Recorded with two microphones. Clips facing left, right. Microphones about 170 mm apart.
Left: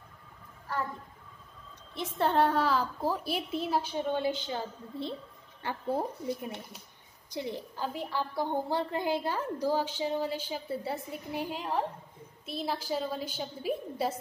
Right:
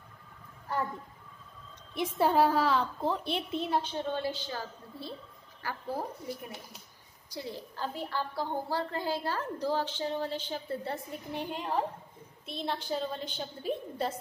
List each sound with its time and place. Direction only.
2.0 s a woman's voice: 10° right (ahead or behind); by 14.1 s 5° left (ahead or behind)